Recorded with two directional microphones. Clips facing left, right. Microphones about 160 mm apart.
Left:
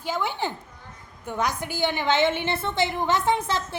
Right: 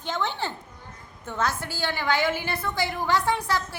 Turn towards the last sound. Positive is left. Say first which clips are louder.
# left 2 dB
turn(degrees=20)  # may be behind; listen again after turning